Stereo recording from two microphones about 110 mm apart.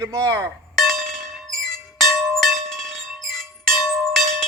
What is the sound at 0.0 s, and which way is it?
Speech, 30° right (ahead or behind).